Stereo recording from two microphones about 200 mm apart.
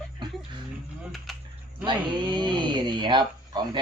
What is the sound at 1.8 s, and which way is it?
Speech, 25° right (ahead or behind).